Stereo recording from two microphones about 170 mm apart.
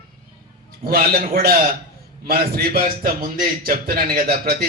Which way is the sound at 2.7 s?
55° right (ahead or behind).